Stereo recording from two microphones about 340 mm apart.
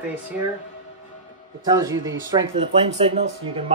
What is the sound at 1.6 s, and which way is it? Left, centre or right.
Speech, centre.